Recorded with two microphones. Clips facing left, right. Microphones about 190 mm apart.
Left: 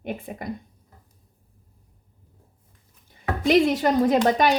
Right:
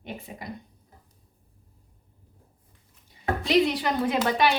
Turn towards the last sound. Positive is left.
turn(degrees=40)  # may be behind; listen again after turning